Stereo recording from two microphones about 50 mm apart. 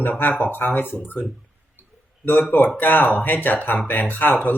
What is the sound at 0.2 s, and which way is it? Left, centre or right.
Speech, left.